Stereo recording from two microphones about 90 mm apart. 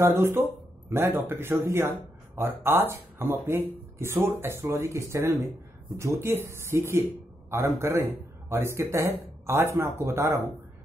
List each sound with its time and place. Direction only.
0.0 s speech: 25° right (ahead or behind)